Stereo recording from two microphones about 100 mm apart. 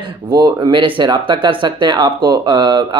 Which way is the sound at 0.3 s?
50° right (ahead or behind).